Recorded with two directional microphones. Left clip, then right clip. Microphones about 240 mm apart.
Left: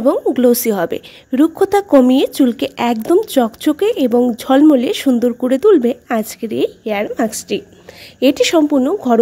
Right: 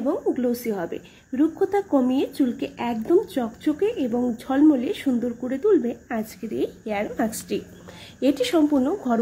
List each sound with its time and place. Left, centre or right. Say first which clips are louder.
0.0 s a woman's voice: left 11 dB; left